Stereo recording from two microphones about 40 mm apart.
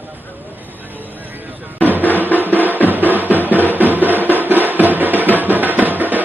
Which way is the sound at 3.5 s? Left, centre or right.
Left.